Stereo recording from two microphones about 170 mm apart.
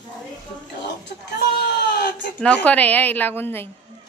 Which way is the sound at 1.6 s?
70° left (ahead or behind).